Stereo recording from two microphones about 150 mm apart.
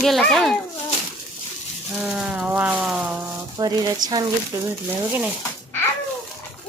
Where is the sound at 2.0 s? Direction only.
10° right (ahead or behind).